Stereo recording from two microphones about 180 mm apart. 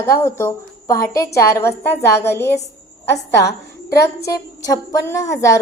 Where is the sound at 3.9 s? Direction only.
15° left (ahead or behind).